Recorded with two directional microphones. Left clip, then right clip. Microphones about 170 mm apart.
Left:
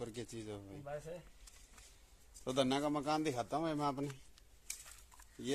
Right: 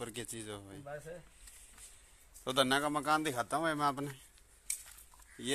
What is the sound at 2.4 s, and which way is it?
Speech, centre (ahead or behind).